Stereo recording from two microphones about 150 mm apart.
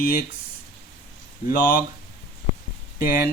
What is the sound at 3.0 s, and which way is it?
Speech, 75° left (ahead or behind).